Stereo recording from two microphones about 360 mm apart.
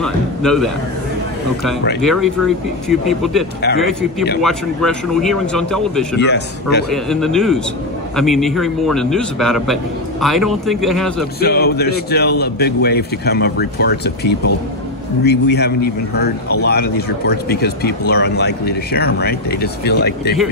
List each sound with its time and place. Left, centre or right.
0.0 s a man's voice: centre
2.0 s a man's voice: centre
6.1 s speech: left
6.9 s a man's voice: centre
11.3 s speech: left